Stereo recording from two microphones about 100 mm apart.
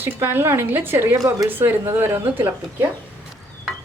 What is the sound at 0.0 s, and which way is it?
A woman's voice, 20° right (ahead or behind).